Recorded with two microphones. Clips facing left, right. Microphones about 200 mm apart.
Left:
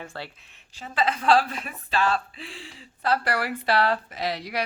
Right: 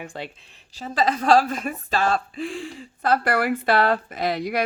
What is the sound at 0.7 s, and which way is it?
A woman's voice, 40° right (ahead or behind).